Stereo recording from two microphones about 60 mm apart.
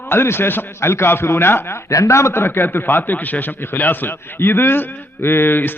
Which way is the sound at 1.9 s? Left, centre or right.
Left.